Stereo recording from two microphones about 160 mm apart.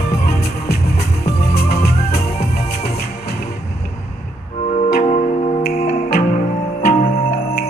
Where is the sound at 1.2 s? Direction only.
80° left.